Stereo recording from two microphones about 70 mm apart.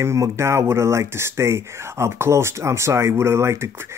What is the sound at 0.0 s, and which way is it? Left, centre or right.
Speech, right.